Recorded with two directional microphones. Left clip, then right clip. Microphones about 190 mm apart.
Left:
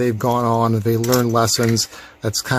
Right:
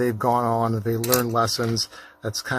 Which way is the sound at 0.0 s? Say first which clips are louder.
Left 3 dB; 25° left (ahead or behind).